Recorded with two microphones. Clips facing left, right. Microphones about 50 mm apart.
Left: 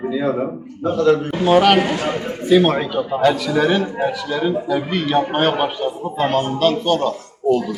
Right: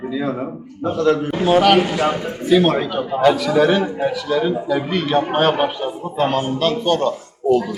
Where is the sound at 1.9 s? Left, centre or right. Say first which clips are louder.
Right 3 dB; right.